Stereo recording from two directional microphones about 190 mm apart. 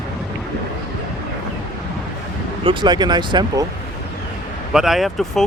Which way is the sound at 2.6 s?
25° right (ahead or behind).